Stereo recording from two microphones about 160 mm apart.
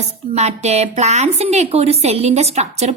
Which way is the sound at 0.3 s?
45° right (ahead or behind).